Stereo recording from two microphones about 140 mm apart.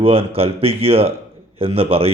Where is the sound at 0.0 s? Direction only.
45° right (ahead or behind).